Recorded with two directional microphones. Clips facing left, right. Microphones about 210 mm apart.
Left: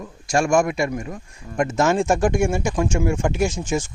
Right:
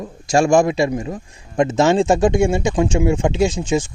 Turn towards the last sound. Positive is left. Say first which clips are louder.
# right 4 dB
turn(degrees=-15)  # may be behind; listen again after turning